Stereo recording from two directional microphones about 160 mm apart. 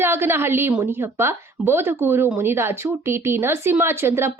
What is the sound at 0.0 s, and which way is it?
Speech, 15° right (ahead or behind).